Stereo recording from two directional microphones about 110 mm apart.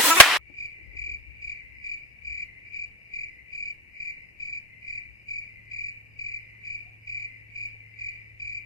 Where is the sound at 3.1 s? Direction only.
35° left (ahead or behind).